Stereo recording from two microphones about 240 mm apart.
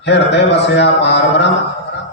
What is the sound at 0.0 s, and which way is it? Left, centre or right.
A man's voice, left.